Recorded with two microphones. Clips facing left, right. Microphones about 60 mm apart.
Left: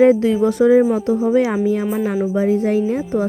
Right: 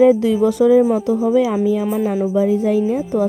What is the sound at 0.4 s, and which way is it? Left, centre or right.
Speech, left.